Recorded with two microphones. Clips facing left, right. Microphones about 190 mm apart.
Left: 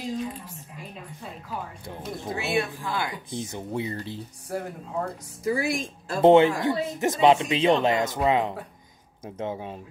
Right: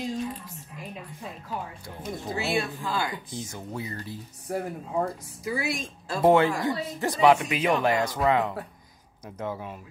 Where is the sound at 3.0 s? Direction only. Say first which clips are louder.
Left 1 dB; 20° left (ahead or behind).